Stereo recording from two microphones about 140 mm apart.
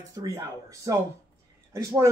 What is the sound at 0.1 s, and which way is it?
Speech, 25° right (ahead or behind).